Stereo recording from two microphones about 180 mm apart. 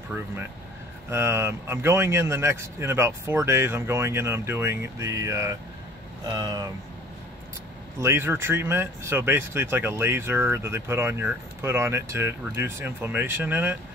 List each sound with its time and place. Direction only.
1.1 s speech: 15° right (ahead or behind)
8.0 s speech: 15° right (ahead or behind)